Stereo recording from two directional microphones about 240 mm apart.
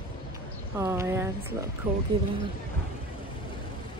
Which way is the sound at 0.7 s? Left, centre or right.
Centre.